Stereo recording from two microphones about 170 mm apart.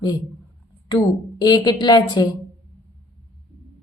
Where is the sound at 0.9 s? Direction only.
25° left (ahead or behind).